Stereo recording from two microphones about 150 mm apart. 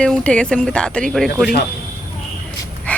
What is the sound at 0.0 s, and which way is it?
Speech, 5° left (ahead or behind).